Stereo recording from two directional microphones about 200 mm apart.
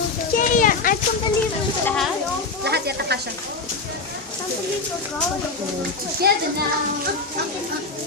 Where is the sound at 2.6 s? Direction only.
55° right (ahead or behind).